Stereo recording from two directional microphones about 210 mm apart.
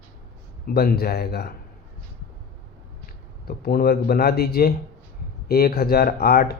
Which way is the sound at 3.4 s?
45° left (ahead or behind).